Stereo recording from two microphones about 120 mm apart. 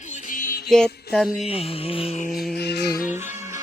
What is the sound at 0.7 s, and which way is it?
Speech, 5° left (ahead or behind).